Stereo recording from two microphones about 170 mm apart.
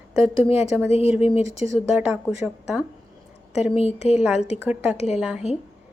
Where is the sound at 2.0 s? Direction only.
10° right (ahead or behind).